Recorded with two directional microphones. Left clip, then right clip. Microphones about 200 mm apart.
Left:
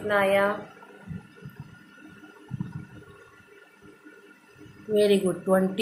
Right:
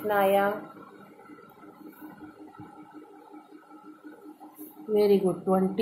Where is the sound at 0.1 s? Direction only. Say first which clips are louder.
Left 1 dB; 20° right (ahead or behind).